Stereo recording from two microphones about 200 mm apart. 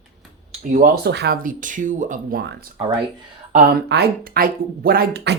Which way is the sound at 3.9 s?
50° right (ahead or behind).